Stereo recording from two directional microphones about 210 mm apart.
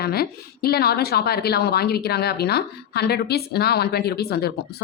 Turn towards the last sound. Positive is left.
turn(degrees=50)  # may be behind; listen again after turning